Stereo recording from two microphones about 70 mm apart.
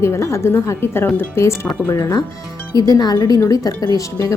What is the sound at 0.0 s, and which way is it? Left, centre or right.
A woman's voice, left.